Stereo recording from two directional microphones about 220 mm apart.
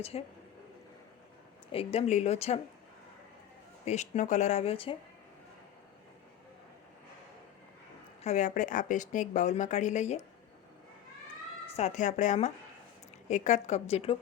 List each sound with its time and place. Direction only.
0.0 s a woman's voice: 25° left (ahead or behind)
1.7 s a woman's voice: 25° left (ahead or behind)
3.8 s a woman's voice: 30° left (ahead or behind)
8.2 s a woman's voice: 35° left (ahead or behind)
11.8 s a woman's voice: 35° left (ahead or behind)